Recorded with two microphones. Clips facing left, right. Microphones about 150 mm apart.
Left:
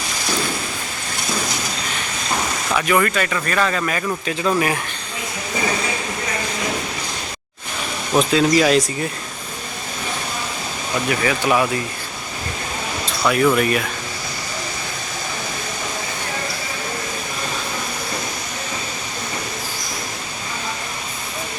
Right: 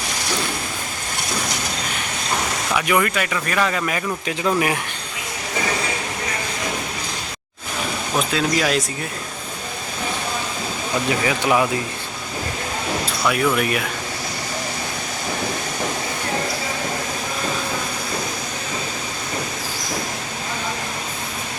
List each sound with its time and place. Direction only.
2.7 s speech: 15° right (ahead or behind)
8.2 s speech: centre (ahead or behind)
11.1 s speech: 20° right (ahead or behind)
13.2 s speech: 5° right (ahead or behind)